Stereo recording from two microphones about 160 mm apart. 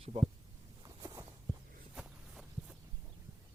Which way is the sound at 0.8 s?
20° right (ahead or behind).